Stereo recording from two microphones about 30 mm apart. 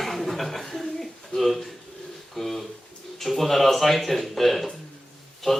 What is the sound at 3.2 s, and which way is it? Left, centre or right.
Speech, centre.